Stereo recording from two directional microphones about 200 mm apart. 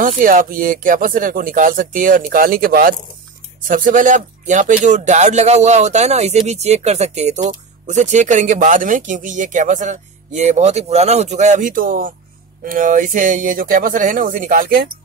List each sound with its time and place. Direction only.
0.0 s speech: 40° right (ahead or behind)